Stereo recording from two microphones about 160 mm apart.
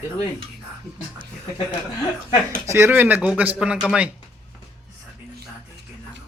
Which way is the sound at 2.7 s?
15° right (ahead or behind).